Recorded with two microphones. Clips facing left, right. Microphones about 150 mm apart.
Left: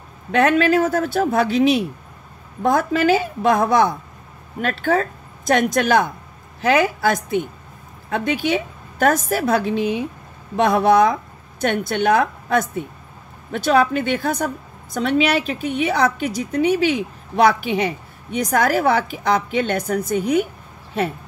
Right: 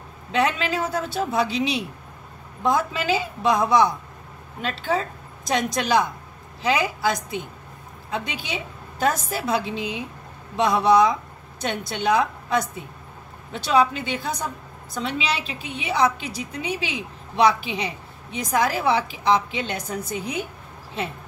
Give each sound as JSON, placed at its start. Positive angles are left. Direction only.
{"t": 0.3, "sound": "a woman's voice", "side_deg": 55}